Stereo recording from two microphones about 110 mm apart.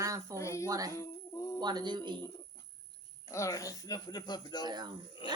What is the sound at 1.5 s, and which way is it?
Speech, 40° right (ahead or behind).